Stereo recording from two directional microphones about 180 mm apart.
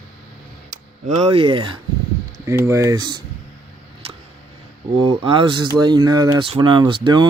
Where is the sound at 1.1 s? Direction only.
35° right (ahead or behind).